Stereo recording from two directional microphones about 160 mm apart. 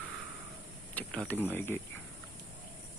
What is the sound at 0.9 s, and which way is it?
Mechanisms, 5° left (ahead or behind).